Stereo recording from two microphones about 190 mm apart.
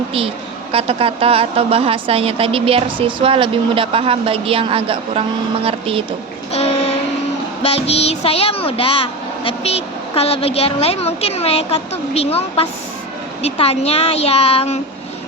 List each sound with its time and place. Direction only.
0.7 s a woman's voice: 30° right (ahead or behind)
6.5 s child singing: 35° left (ahead or behind)
7.6 s a woman's voice: 30° left (ahead or behind)